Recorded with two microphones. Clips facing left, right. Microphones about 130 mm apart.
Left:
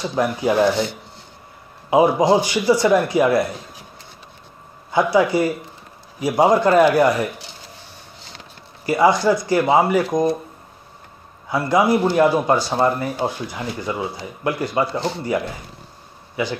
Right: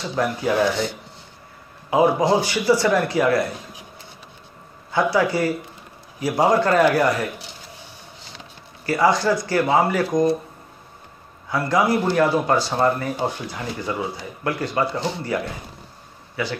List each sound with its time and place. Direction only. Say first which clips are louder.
0.0 s speech: left 3 dB; 15° left (ahead or behind)
1.9 s speech: left 3 dB; 15° left (ahead or behind)
4.9 s speech: left 3 dB; 15° left (ahead or behind)
8.8 s speech: left 3 dB; 15° left (ahead or behind)
11.4 s speech: left 2 dB; 15° left (ahead or behind)